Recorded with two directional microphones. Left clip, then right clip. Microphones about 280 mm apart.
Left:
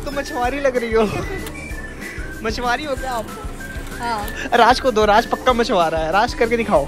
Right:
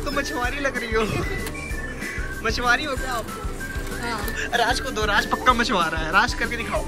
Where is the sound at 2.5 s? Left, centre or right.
Centre.